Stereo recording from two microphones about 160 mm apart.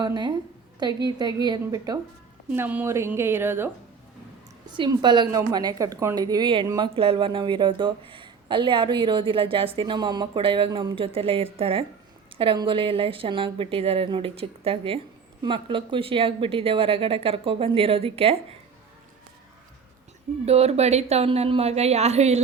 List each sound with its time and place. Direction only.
0.0 s a woman's voice: 25° right (ahead or behind)
2.5 s a woman's voice: 10° right (ahead or behind)
4.6 s a woman's voice: 30° right (ahead or behind)
20.4 s a woman's voice: 40° right (ahead or behind)